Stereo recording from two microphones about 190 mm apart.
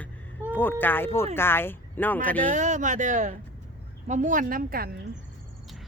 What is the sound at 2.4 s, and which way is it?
A woman's voice, 40° right (ahead or behind).